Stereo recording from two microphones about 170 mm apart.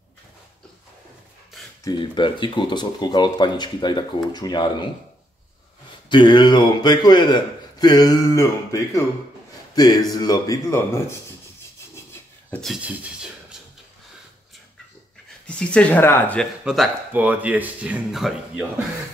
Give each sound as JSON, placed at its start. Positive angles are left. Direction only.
{"t": 1.9, "sound": "speech", "side_deg": 30}
{"t": 6.0, "sound": "speech", "side_deg": 25}
{"t": 11.9, "sound": "rub", "side_deg": 15}
{"t": 12.5, "sound": "speech", "side_deg": 0}
{"t": 15.4, "sound": "speech", "side_deg": 5}
{"t": 16.6, "sound": "speech", "side_deg": 0}